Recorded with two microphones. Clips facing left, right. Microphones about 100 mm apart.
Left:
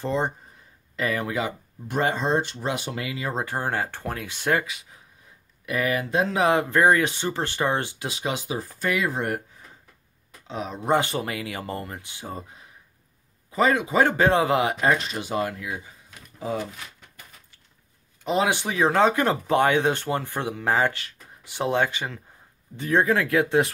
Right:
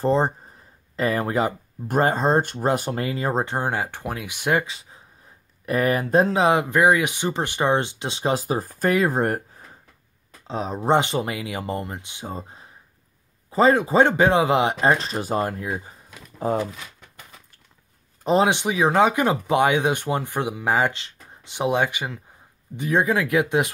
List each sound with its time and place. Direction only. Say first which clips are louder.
0.0 s speech: right 5 dB; 35° right (ahead or behind)
3.4 s speech: right 2 dB; 20° right (ahead or behind)
4.6 s a sound: even; 30° right (ahead or behind)
5.7 s speech: right 4 dB; 40° right (ahead or behind)
6.3 s speech: right 2 dB; 20° right (ahead or behind); by 9.4 s 40° right (ahead or behind)
10.4 s speech: right 4 dB; 35° right (ahead or behind)
11.0 s speech: right 3 dB; 20° right (ahead or behind)
13.5 s speech: right 4 dB; 30° right (ahead or behind)
14.0 s speech: right 2 dB; 20° right (ahead or behind); by 16.6 s 50° right (ahead or behind)
18.2 s speech: right 5 dB; 35° right (ahead or behind)
18.5 s speech: right 2 dB; 15° right (ahead or behind)